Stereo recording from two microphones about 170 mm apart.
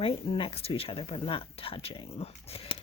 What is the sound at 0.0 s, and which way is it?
Speech, 35° left (ahead or behind).